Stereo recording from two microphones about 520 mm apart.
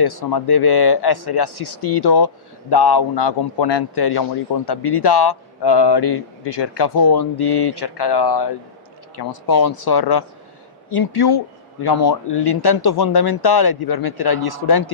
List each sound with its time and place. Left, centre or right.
0.0 s speech: left